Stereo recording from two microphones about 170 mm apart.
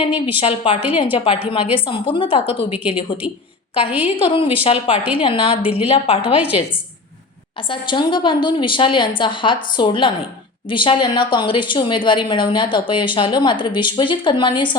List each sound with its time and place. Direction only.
0.3 s a woman's voice: 30° left (ahead or behind)
7.7 s a woman's voice: 30° left (ahead or behind)